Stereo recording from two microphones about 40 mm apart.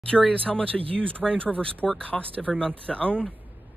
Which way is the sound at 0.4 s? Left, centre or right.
Left.